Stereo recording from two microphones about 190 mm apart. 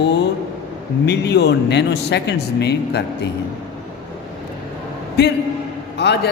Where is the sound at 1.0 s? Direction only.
60° left (ahead or behind).